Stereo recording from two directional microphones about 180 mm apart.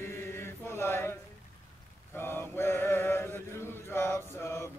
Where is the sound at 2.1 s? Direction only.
10° left (ahead or behind).